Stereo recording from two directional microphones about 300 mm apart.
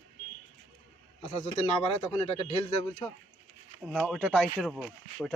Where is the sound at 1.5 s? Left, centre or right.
Centre.